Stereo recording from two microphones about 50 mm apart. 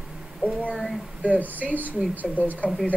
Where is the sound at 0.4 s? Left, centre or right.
Right.